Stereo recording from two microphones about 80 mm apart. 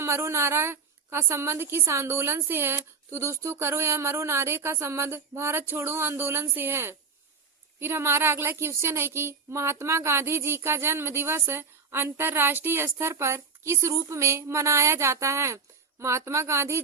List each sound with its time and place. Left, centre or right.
0.0 s a woman's voice: right